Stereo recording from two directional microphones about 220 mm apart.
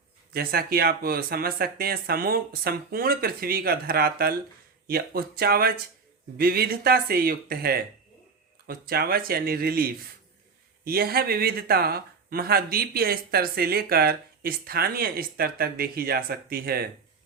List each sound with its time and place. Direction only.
0.3 s speech: 45° right (ahead or behind)